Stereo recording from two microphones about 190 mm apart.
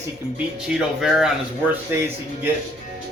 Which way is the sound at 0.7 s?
5° right (ahead or behind).